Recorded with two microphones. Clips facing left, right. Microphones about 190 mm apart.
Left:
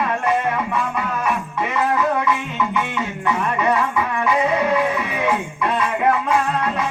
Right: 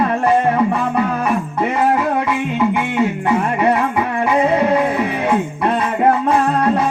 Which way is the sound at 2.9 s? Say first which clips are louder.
Right 7 dB; 30° right (ahead or behind).